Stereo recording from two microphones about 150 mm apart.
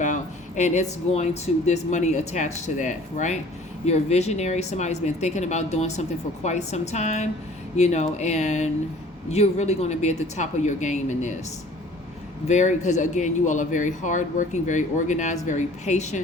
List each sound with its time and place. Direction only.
0.0 s speech: 55° left (ahead or behind)
12.5 s speech: 50° left (ahead or behind)